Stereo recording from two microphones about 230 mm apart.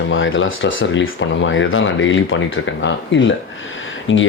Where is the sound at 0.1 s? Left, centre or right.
Left.